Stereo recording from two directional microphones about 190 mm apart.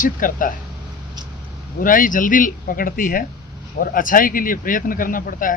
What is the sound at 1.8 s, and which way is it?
Speech, 45° left (ahead or behind).